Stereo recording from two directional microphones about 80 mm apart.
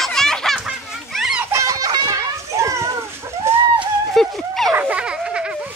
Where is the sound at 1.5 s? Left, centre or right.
Right.